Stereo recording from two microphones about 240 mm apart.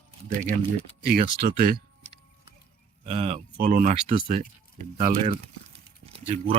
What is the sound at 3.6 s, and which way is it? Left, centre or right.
Speech, right.